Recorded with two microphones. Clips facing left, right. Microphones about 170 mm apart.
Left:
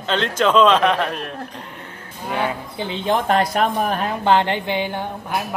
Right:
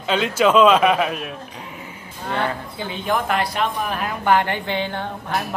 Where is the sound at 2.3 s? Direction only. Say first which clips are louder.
Left 1 dB; 10° left (ahead or behind).